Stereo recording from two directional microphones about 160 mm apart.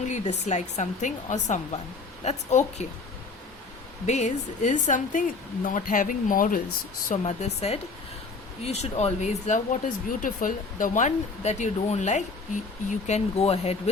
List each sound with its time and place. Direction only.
0.0 s speech: 45° left (ahead or behind)
4.0 s speech: 45° left (ahead or behind)
7.0 s speech: 45° left (ahead or behind)